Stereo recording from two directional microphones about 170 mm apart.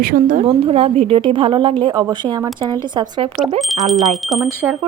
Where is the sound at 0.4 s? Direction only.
35° right (ahead or behind).